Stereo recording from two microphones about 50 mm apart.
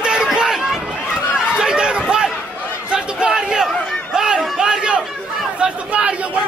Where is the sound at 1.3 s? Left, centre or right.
Centre.